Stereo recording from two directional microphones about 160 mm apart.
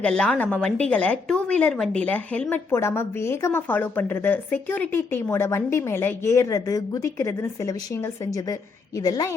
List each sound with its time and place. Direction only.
0.0 s a woman's voice: 5° left (ahead or behind); by 9.3 s 25° left (ahead or behind)